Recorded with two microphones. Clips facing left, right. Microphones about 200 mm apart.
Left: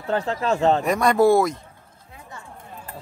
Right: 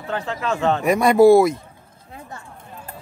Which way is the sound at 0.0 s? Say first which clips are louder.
Left 2 dB; 35° left (ahead or behind).